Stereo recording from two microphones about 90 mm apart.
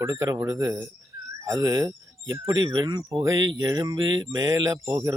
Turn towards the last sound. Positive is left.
turn(degrees=-40)  # may be behind; listen again after turning